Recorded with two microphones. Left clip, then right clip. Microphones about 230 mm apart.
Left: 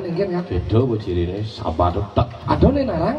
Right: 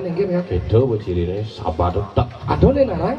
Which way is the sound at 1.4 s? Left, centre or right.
Left.